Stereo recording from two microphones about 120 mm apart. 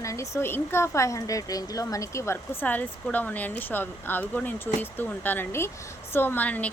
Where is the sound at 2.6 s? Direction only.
10° left (ahead or behind).